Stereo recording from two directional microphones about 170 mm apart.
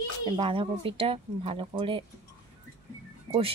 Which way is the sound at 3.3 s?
30° right (ahead or behind).